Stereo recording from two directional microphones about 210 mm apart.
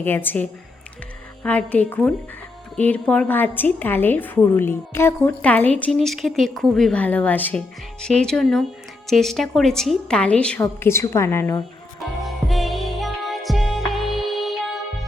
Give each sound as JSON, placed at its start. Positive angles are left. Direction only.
{"t": 0.0, "sound": "a woman's voice", "side_deg": 10}
{"t": 1.5, "sound": "a woman's voice", "side_deg": 5}
{"t": 11.9, "sound": "music", "side_deg": 0}